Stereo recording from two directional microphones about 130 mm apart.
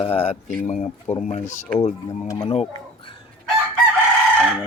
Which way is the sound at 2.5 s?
45° left (ahead or behind).